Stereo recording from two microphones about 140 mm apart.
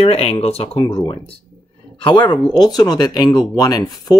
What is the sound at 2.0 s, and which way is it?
Speech, 35° left (ahead or behind).